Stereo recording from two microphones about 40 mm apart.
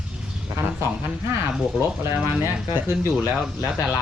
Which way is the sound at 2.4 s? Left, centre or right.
Right.